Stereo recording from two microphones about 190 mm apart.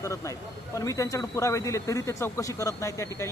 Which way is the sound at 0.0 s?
15° left (ahead or behind).